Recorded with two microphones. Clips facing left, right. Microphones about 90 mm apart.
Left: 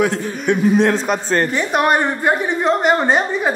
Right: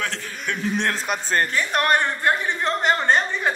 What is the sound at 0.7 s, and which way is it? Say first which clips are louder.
A man's voice: left 8 dB; 5° left (ahead or behind).